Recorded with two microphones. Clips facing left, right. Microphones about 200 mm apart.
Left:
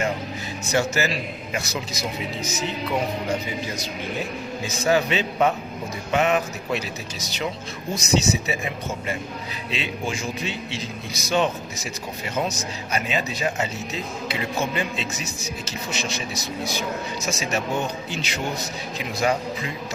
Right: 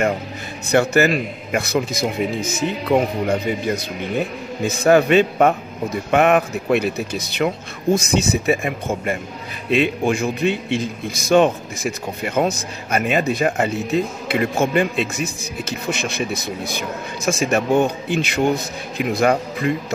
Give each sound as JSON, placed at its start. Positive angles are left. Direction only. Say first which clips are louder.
{"t": 0.7, "sound": "a man's voice", "louder": "right 7 dB", "side_deg": -60}